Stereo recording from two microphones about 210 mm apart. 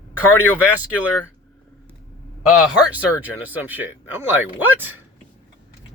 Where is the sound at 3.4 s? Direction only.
10° right (ahead or behind).